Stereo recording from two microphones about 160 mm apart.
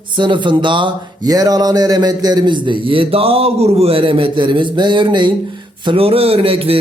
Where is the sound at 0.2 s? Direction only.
30° right (ahead or behind).